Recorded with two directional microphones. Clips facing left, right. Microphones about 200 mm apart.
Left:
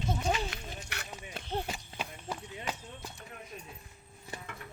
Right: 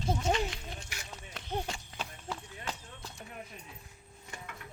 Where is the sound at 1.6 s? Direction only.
10° left (ahead or behind).